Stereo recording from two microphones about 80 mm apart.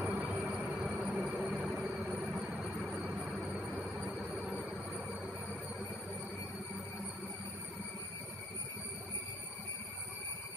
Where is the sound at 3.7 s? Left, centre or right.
Centre.